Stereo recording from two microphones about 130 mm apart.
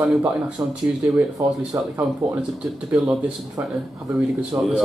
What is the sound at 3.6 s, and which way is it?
Speech, 20° right (ahead or behind).